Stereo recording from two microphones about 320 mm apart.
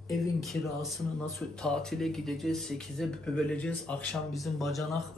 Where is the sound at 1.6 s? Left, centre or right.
Centre.